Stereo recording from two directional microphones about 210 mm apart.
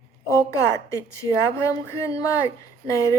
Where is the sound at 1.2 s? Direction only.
15° left (ahead or behind).